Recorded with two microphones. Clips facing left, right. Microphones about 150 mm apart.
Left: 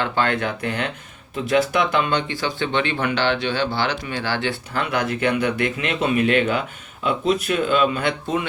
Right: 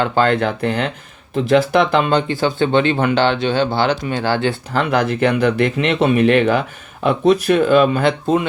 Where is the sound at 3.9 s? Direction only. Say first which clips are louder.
Right 7 dB; 45° right (ahead or behind).